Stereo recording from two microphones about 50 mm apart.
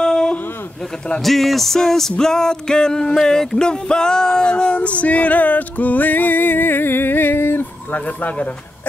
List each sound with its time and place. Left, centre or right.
0.0 s a sound: centre
1.2 s music: centre; by 7.6 s left
7.9 s speech: left